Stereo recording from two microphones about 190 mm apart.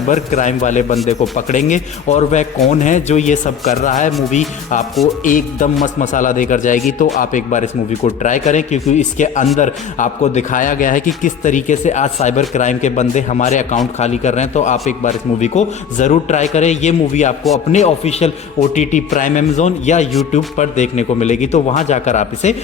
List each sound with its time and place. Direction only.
0.1 s a man's voice: 40° left (ahead or behind)